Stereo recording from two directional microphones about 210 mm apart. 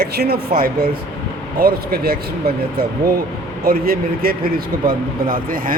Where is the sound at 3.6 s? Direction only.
45° right (ahead or behind).